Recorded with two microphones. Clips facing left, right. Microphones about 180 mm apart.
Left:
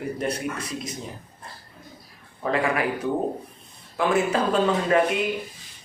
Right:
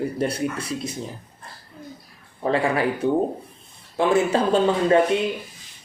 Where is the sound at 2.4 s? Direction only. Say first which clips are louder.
Right 3 dB; 30° right (ahead or behind).